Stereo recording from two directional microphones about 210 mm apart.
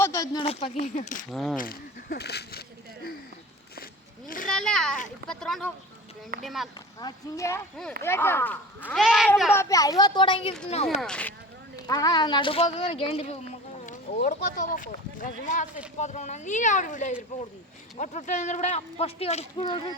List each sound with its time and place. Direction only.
0.0 s speech: 15° left (ahead or behind)
0.4 s speech: 30° left (ahead or behind)
1.3 s cat: centre (ahead or behind)
1.5 s speech: 45° left (ahead or behind)
4.4 s a child's voice: 5° left (ahead or behind)
5.3 s cat: centre (ahead or behind)
7.0 s a woman's voice: 15° left (ahead or behind)
8.9 s cat: centre (ahead or behind)
9.6 s a woman's voice: 15° left (ahead or behind)
11.0 s cat: 5° left (ahead or behind)
11.9 s speech: 20° left (ahead or behind)